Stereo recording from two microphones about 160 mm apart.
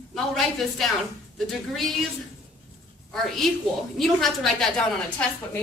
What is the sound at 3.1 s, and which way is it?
A woman's voice, centre (ahead or behind).